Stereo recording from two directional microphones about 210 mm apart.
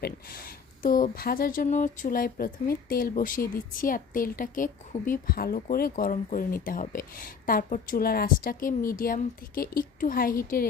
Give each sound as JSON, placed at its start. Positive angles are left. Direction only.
{"t": 0.0, "sound": "speech", "side_deg": 45}